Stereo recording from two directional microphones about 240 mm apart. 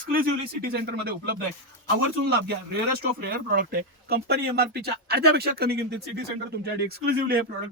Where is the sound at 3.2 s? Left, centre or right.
Right.